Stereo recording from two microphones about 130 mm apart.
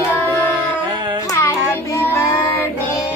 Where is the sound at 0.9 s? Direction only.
35° right (ahead or behind).